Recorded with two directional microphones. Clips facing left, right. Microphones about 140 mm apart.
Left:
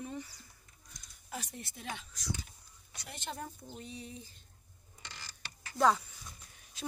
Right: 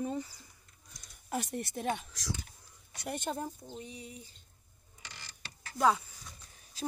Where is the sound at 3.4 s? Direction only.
20° right (ahead or behind).